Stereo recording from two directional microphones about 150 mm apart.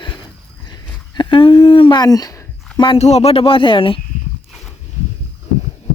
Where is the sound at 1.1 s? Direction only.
35° left (ahead or behind).